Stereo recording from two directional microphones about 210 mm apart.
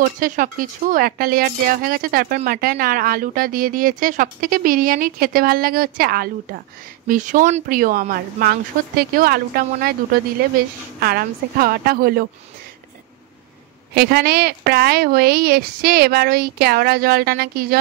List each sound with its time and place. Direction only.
0.0 s a woman's voice: 40° right (ahead or behind)
11.0 s a woman's voice: 45° right (ahead or behind)
13.9 s a woman's voice: 50° right (ahead or behind)